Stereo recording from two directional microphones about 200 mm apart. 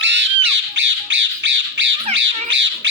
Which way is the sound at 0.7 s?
65° right (ahead or behind).